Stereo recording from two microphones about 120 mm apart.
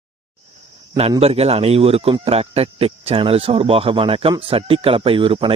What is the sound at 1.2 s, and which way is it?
Speech, 60° right (ahead or behind).